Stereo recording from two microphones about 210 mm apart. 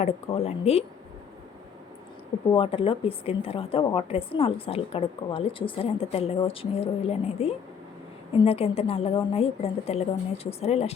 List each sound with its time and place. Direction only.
0.0 s a woman's voice: 30° left (ahead or behind)
2.5 s a woman's voice: 25° left (ahead or behind)